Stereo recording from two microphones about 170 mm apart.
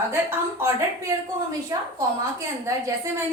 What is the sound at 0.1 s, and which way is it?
A woman's voice, 15° right (ahead or behind).